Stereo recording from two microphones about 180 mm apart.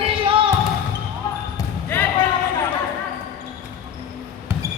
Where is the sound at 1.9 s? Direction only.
10° left (ahead or behind).